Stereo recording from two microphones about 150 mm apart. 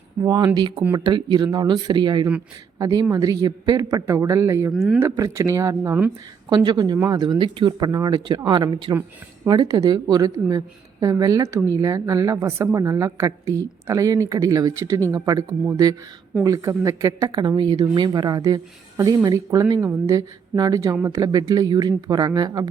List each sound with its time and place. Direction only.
0.2 s speech: 25° right (ahead or behind)
4.7 s speech: 5° right (ahead or behind)
4.9 s speech: 20° right (ahead or behind)
6.5 s speech: 30° right (ahead or behind)